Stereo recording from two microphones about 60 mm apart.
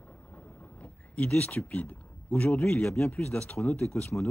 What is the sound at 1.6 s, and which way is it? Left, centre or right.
Speech, left.